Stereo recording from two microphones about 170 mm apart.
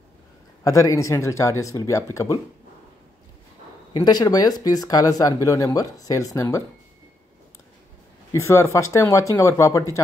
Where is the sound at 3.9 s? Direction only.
25° left (ahead or behind).